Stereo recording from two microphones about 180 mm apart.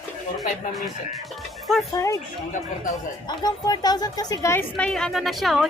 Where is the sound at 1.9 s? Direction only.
15° left (ahead or behind).